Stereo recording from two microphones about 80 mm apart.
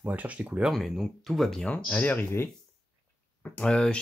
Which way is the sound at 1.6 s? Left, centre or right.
Centre.